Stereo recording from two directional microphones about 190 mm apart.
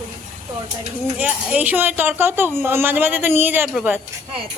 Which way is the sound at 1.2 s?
10° right (ahead or behind).